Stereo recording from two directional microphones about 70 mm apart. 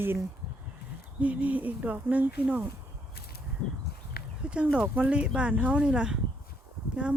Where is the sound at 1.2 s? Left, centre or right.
Right.